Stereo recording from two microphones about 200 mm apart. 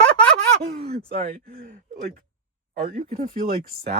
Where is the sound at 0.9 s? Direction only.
50° right (ahead or behind).